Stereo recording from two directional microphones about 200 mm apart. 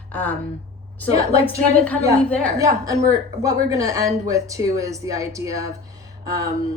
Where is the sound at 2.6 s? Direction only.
15° right (ahead or behind).